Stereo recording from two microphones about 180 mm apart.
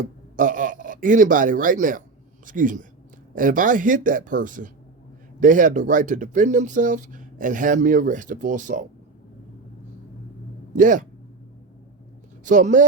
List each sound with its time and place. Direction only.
0.3 s speech: 50° right (ahead or behind)
10.8 s speech: 45° right (ahead or behind)
12.5 s speech: 45° right (ahead or behind)